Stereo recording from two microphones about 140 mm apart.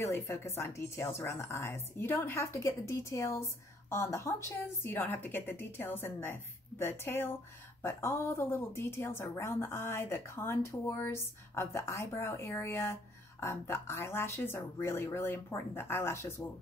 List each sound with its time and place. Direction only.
0.0 s a woman's voice: 20° left (ahead or behind)